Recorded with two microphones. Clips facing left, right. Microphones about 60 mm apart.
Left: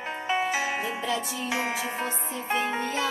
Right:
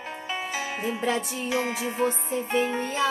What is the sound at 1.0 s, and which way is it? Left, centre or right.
Music, right.